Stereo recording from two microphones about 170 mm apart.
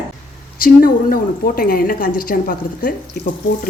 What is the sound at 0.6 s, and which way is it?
A woman's voice, 60° left (ahead or behind).